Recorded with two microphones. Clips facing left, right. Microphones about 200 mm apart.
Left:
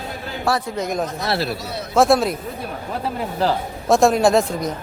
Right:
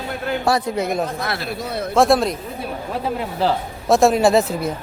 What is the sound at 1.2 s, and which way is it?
Speech, 30° left (ahead or behind).